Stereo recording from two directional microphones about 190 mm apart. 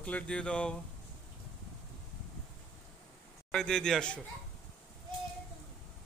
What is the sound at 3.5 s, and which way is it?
Speech, 5° left (ahead or behind).